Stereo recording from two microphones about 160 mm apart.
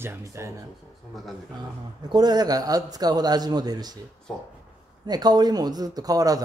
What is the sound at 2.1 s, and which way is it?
A man's voice, 25° right (ahead or behind).